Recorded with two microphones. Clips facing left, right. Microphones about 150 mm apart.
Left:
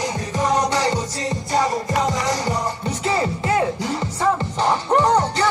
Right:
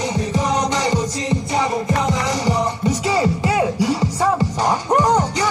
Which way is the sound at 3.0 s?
10° right (ahead or behind).